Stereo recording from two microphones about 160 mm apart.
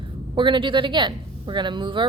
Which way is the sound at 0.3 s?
30° right (ahead or behind).